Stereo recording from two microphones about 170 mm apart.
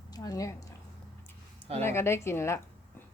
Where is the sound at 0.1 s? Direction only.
20° left (ahead or behind).